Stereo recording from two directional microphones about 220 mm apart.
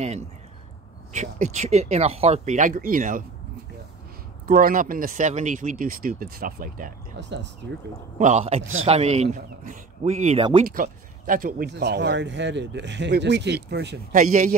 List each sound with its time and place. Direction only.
1.1 s speech: 35° right (ahead or behind)
4.5 s speech: 40° right (ahead or behind)
7.2 s speech: 55° right (ahead or behind)
8.2 s speech: 30° right (ahead or behind)
10.7 s speech: 40° right (ahead or behind)